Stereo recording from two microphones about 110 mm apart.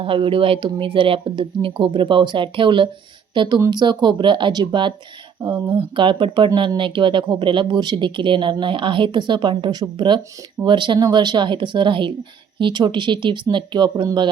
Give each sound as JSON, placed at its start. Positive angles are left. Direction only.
{"t": 0.0, "sound": "speech", "side_deg": -55}